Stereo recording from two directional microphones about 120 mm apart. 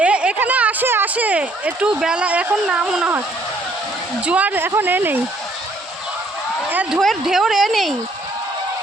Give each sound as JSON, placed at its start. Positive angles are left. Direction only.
{"t": 0.0, "sound": "speech", "side_deg": -10}
{"t": 4.3, "sound": "speech", "side_deg": -15}
{"t": 6.7, "sound": "speech", "side_deg": -15}
{"t": 7.0, "sound": "speech", "side_deg": 0}